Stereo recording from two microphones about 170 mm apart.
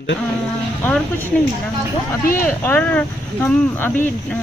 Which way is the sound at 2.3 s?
55° left (ahead or behind).